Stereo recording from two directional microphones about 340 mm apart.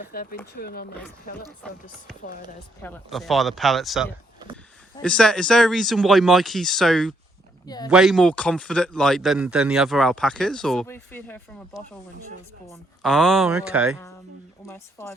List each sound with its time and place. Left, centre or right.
0.0 s speech: left
1.6 s a man's voice: centre
2.8 s a man's voice: centre